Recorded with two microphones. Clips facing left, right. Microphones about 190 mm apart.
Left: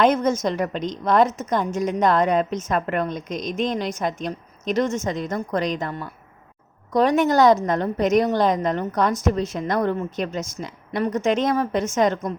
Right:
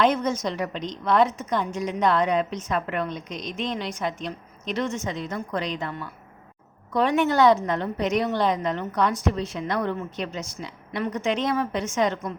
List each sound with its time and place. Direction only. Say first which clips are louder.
0.0 s a woman's voice: left 4 dB; 45° left (ahead or behind)